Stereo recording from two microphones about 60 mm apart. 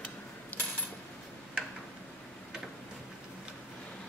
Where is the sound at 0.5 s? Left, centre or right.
Left.